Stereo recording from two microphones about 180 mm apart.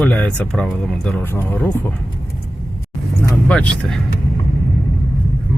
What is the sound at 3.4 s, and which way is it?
Speech, 5° left (ahead or behind).